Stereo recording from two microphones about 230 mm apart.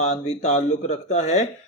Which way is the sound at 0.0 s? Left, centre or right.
Left.